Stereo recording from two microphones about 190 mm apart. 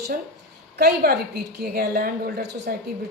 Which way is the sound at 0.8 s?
55° right (ahead or behind).